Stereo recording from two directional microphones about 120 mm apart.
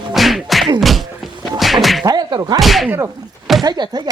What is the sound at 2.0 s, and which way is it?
Whip, 35° right (ahead or behind).